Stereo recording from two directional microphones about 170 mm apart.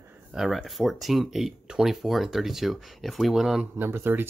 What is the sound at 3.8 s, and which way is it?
Speech, 15° right (ahead or behind).